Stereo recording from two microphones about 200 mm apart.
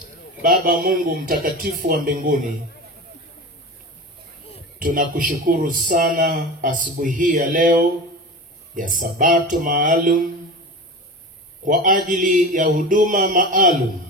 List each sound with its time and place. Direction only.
0.4 s a man's voice: 45° right (ahead or behind)
4.7 s a man's voice: 40° right (ahead or behind)
11.6 s a man's voice: 40° right (ahead or behind)